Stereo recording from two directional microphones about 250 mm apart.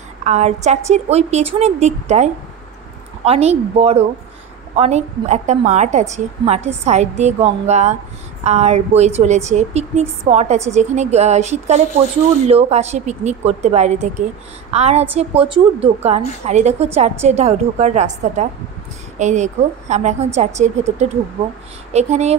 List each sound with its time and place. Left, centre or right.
0.2 s a woman's voice: right
21.9 s a woman's voice: right